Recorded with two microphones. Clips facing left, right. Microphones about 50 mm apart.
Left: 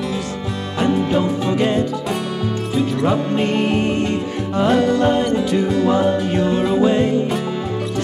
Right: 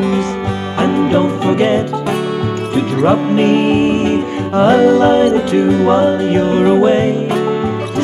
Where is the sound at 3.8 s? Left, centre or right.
Right.